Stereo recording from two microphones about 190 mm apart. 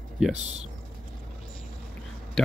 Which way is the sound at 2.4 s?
Centre (ahead or behind).